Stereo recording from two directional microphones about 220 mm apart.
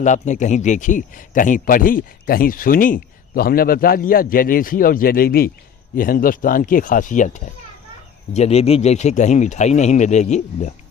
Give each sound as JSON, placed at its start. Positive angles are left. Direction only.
{"t": 0.0, "sound": "speech", "side_deg": 35}